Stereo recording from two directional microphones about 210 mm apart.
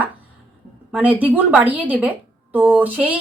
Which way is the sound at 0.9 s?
5° right (ahead or behind).